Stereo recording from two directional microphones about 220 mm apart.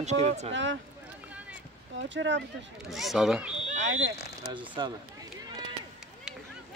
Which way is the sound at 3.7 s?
35° right (ahead or behind).